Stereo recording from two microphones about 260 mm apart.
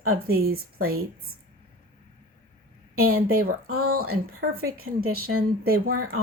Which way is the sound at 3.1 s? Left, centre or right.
Right.